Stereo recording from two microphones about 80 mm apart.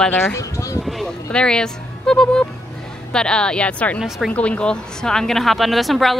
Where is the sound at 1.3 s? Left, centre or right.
Centre.